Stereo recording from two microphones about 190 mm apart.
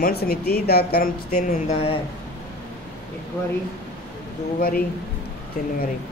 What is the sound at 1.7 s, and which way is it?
Speech, 30° left (ahead or behind).